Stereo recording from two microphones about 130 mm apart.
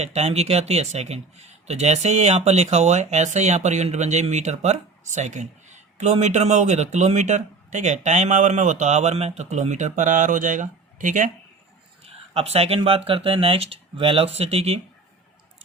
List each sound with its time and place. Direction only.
0.0 s speech: 60° right (ahead or behind); by 11.3 s 90° right
12.0 s speech: 50° right (ahead or behind)